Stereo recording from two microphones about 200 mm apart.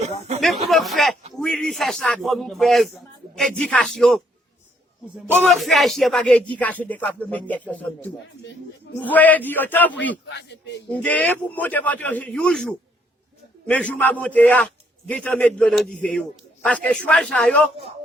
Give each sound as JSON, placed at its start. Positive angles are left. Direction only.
{"t": 0.4, "sound": "a sound", "side_deg": 0}
{"t": 1.3, "sound": "a man's voice", "side_deg": 0}
{"t": 5.3, "sound": "speech", "side_deg": 5}
{"t": 10.2, "sound": "speech", "side_deg": 60}
{"t": 10.9, "sound": "a man's voice", "side_deg": 5}